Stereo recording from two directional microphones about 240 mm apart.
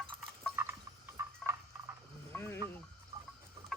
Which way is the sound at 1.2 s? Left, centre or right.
Centre.